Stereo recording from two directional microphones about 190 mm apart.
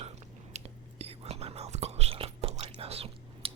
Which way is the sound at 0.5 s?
35° right (ahead or behind).